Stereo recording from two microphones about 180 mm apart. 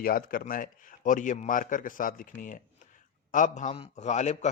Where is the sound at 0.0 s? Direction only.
50° left (ahead or behind).